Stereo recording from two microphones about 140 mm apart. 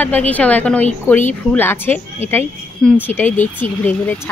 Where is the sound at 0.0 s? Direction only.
10° left (ahead or behind).